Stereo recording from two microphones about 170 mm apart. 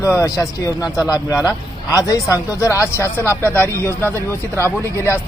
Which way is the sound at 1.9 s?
20° left (ahead or behind).